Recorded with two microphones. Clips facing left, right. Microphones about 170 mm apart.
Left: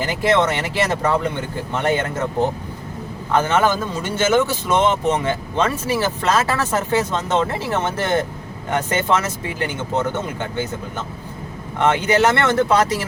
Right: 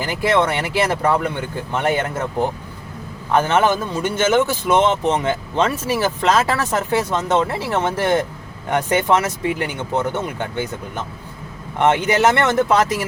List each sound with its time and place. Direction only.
0.2 s speech: 10° right (ahead or behind)
3.3 s speech: 15° right (ahead or behind)
11.8 s speech: 15° right (ahead or behind)